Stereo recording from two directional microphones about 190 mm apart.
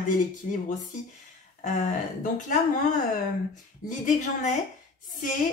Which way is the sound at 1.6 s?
45° left (ahead or behind).